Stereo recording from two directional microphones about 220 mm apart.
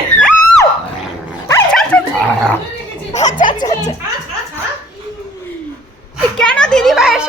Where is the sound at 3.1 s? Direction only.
30° left (ahead or behind).